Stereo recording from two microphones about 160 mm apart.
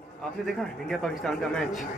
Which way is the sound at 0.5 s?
Centre (ahead or behind).